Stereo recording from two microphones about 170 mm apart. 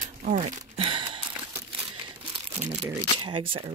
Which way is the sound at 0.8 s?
30° right (ahead or behind).